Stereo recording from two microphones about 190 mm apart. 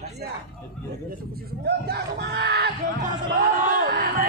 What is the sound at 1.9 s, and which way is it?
Speech, 60° right (ahead or behind).